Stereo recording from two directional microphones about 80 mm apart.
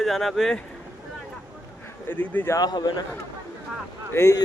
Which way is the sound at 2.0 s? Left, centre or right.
Left.